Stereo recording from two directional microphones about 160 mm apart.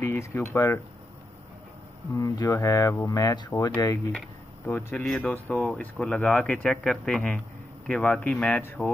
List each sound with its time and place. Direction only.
0.0 s speech: 15° left (ahead or behind)
2.1 s speech: 25° left (ahead or behind)
4.6 s speech: 15° left (ahead or behind)